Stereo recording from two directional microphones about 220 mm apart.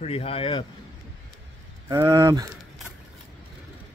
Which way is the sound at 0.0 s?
25° left (ahead or behind).